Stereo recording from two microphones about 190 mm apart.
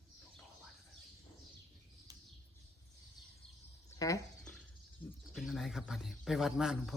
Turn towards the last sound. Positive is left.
turn(degrees=0)  # may be behind; listen again after turning